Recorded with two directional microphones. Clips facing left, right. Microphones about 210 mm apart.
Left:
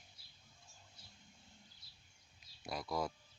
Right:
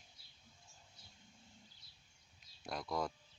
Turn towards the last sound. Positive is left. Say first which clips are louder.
# even
turn(degrees=5)  # may be behind; listen again after turning